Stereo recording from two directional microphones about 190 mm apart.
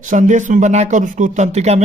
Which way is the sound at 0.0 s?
40° right (ahead or behind).